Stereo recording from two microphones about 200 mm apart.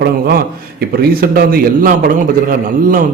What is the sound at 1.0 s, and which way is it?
Speech, 50° right (ahead or behind).